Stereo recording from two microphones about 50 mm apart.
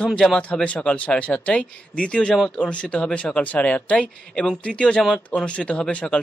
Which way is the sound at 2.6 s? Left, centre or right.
Left.